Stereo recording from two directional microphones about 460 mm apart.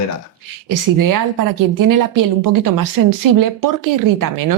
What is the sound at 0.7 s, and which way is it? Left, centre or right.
Speech, right.